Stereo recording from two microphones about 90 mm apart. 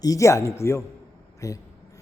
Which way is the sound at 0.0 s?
40° left (ahead or behind).